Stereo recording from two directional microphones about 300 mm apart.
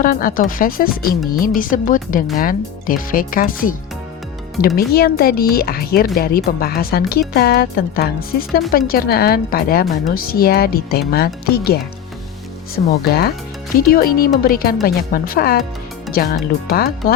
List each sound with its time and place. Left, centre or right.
0.0 s speech: left
4.8 s speech: left
16.6 s speech: left